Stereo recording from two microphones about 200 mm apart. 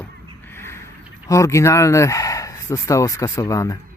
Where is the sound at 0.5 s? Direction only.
10° left (ahead or behind).